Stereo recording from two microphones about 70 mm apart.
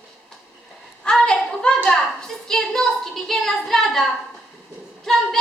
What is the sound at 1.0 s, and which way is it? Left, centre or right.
A woman's voice, centre.